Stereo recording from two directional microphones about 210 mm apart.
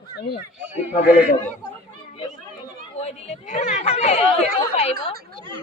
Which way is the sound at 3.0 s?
35° left (ahead or behind).